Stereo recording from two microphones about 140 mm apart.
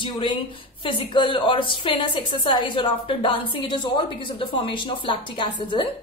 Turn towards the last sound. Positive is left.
turn(degrees=35)  # may be behind; listen again after turning